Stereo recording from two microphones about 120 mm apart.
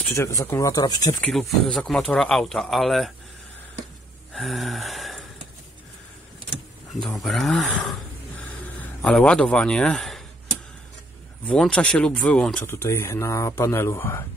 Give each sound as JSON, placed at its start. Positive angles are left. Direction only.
{"t": 0.0, "sound": "speech", "side_deg": 20}
{"t": 1.2, "sound": "speech", "side_deg": 5}
{"t": 4.3, "sound": "gasp", "side_deg": 0}
{"t": 7.0, "sound": "speech", "side_deg": 5}
{"t": 8.5, "sound": "a sound", "side_deg": 10}
{"t": 11.4, "sound": "speech", "side_deg": 10}
{"t": 12.6, "sound": "speech", "side_deg": 20}